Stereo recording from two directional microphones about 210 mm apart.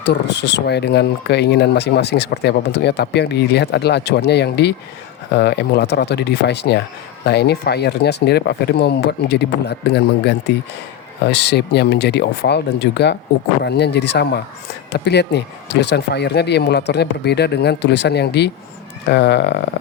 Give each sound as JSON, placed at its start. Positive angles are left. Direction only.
{"t": 0.0, "sound": "speech", "side_deg": 55}